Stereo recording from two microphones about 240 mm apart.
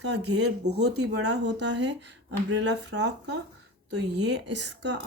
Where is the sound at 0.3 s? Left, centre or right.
Right.